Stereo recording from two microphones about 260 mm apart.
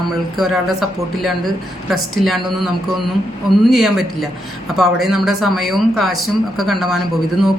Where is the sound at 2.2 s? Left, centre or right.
Centre.